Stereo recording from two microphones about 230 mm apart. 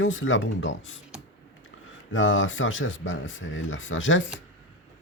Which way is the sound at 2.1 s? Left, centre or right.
Left.